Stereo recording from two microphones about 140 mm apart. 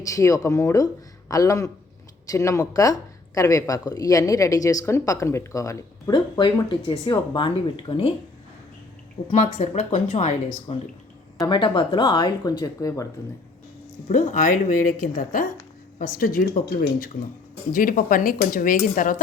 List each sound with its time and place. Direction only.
0.0 s speech: 25° left (ahead or behind); by 8.1 s 40° left (ahead or behind)
9.3 s speech: 55° left (ahead or behind)
11.3 s speech: 30° left (ahead or behind)
14.1 s speech: 65° left (ahead or behind)